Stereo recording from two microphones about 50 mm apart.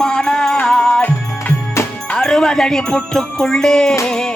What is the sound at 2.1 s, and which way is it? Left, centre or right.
Music, centre.